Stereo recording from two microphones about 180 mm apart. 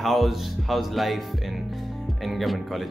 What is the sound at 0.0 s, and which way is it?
Speech, centre (ahead or behind).